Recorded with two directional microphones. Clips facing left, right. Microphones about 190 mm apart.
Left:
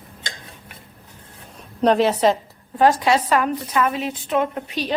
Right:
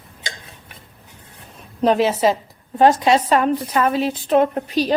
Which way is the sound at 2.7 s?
25° right (ahead or behind).